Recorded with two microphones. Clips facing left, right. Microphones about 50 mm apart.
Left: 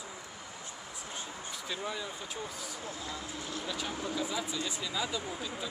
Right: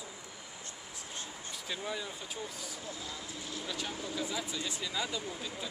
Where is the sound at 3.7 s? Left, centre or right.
Centre.